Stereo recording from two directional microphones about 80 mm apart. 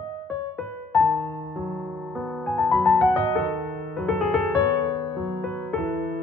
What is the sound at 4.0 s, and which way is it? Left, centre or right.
Music, centre.